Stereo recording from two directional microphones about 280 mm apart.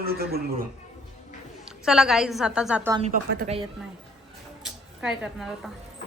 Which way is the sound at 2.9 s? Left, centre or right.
Right.